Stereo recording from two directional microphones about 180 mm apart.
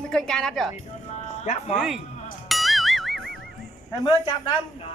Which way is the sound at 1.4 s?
40° left (ahead or behind).